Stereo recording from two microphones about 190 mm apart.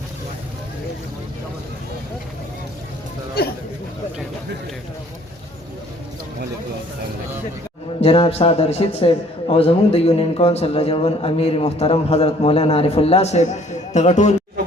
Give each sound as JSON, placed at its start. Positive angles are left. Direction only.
{"t": 8.0, "sound": "a man's voice", "side_deg": 30}